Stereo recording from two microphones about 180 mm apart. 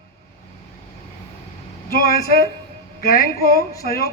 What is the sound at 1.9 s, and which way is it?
A man's voice, 55° left (ahead or behind).